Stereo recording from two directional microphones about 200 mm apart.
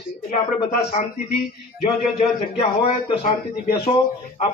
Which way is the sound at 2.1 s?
30° left (ahead or behind).